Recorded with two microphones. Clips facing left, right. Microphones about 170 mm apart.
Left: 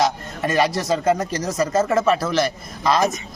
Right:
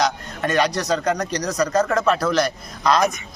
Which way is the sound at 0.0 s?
5° left (ahead or behind).